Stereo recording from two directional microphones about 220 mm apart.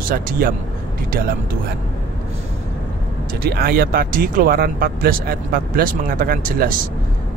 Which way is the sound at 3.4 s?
45° right (ahead or behind).